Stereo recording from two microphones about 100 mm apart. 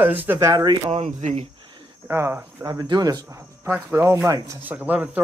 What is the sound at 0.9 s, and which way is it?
Speech, 80° right.